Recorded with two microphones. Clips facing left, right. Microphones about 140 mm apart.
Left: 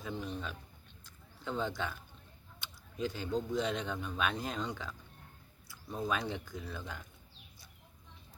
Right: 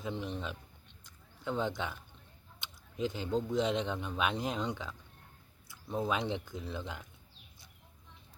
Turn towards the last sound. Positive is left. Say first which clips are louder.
# right 3 dB
turn(degrees=-20)  # may be behind; listen again after turning